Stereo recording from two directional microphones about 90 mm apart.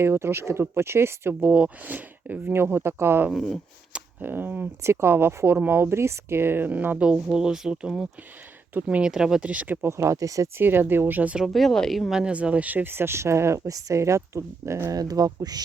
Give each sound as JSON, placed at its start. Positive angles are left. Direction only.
{"t": 0.0, "sound": "speech", "side_deg": -30}
{"t": 3.3, "sound": "a woman's voice", "side_deg": 5}
{"t": 3.9, "sound": "speech", "side_deg": -20}
{"t": 4.8, "sound": "speech", "side_deg": -30}
{"t": 10.0, "sound": "speech", "side_deg": -35}
{"t": 10.6, "sound": "speech", "side_deg": -25}
{"t": 11.4, "sound": "a woman's voice", "side_deg": 0}
{"t": 12.2, "sound": "speech", "side_deg": -15}
{"t": 14.9, "sound": "speech", "side_deg": -45}